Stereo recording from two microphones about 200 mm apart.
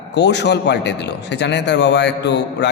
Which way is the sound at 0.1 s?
60° left (ahead or behind).